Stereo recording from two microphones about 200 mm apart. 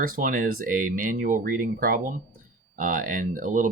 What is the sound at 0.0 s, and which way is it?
Speech, 45° right (ahead or behind).